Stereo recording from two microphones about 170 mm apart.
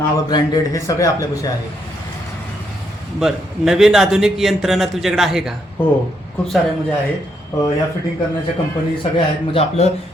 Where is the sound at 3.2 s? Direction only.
Centre (ahead or behind).